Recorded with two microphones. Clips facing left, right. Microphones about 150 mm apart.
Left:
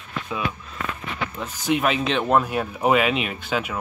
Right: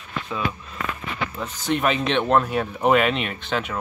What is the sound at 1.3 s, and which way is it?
Speech, 5° left (ahead or behind).